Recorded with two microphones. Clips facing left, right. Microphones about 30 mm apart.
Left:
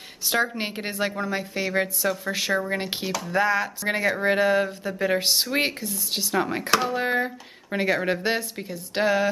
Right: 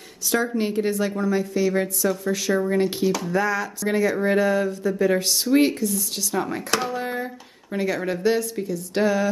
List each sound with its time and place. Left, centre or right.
0.2 s a woman's voice: left
3.1 s speech: centre
3.3 s speech: left
6.7 s speech: centre
7.0 s speech: left